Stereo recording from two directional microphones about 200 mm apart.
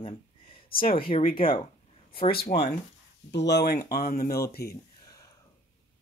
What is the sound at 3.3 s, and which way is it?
Speech, 60° left (ahead or behind).